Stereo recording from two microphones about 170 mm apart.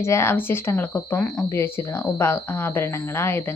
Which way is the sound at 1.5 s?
15° left (ahead or behind).